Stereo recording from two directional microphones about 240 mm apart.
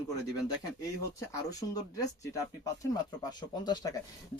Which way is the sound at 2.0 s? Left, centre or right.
Centre.